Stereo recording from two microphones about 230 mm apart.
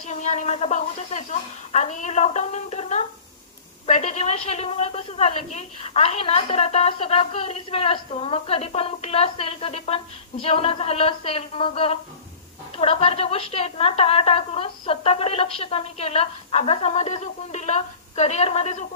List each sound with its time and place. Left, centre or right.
0.0 s a woman's voice: left